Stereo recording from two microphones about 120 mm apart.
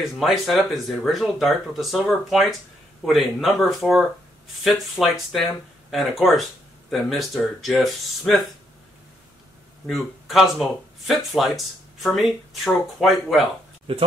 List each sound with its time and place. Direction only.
0.2 s speech: centre (ahead or behind)
9.8 s speech: centre (ahead or behind)
13.9 s speech: 50° right (ahead or behind)